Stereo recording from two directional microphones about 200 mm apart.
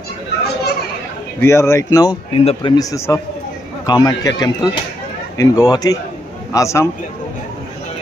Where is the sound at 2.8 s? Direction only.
15° left (ahead or behind).